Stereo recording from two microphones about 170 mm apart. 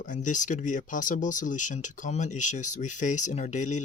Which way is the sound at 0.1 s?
50° left (ahead or behind).